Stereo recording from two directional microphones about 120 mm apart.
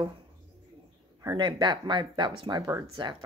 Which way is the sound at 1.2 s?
35° right (ahead or behind).